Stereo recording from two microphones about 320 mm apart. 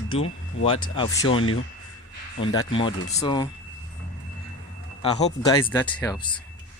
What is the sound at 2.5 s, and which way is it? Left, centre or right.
Speech, centre.